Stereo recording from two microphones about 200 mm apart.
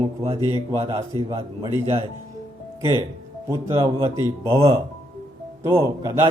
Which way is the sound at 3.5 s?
20° right (ahead or behind).